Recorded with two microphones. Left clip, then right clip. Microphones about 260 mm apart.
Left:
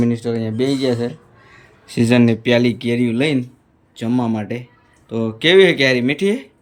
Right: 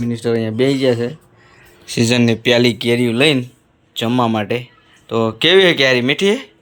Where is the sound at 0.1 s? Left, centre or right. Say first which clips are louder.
Right 3 dB; centre.